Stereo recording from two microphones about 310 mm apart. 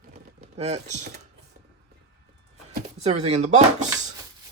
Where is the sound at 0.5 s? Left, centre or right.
Right.